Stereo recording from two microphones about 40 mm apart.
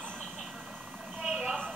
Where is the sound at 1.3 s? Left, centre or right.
Centre.